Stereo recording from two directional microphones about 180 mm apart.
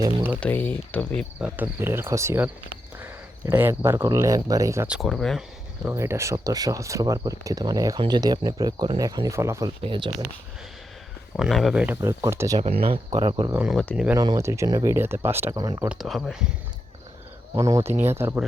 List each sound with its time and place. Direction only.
0.0 s speech: 10° right (ahead or behind)
0.3 s speech: 10° left (ahead or behind)
1.4 s speech: 5° right (ahead or behind)
4.9 s speech: centre (ahead or behind)
5.9 s speech: 15° right (ahead or behind)
9.8 s speech: 30° right (ahead or behind)
11.3 s speech: centre (ahead or behind); by 12.6 s 15° right (ahead or behind)
13.1 s speech: 30° right (ahead or behind)
13.5 s speech: 10° right (ahead or behind)
14.2 s speech: 20° right (ahead or behind)
15.9 s speech: centre (ahead or behind)
17.5 s speech: 15° right (ahead or behind)